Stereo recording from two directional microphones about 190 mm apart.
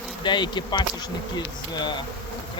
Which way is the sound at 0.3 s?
25° left (ahead or behind).